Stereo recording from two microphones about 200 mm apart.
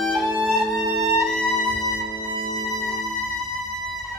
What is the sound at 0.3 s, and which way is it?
Music, 15° left (ahead or behind).